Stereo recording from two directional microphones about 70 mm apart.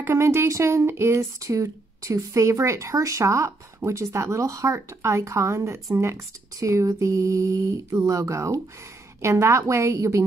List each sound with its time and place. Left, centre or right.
0.1 s speech: right